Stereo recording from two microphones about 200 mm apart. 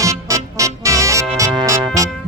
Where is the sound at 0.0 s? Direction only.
15° right (ahead or behind).